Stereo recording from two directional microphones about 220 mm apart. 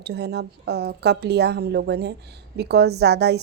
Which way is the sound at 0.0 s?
50° right (ahead or behind).